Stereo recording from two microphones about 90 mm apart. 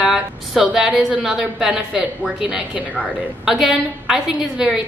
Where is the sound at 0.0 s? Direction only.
5° right (ahead or behind).